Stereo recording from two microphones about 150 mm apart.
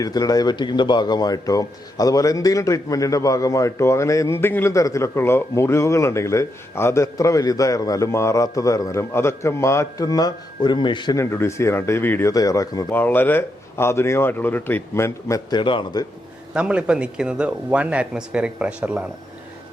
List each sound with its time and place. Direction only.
0.0 s speech: 25° left (ahead or behind)
11.2 s speech: 20° left (ahead or behind)
12.9 s speech: 15° left (ahead or behind); by 16.0 s 30° left (ahead or behind)
16.6 s speech: 5° right (ahead or behind)